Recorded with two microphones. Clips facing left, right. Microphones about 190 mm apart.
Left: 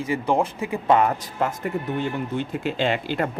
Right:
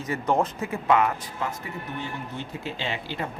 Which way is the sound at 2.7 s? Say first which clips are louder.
Left 9 dB; 55° left (ahead or behind).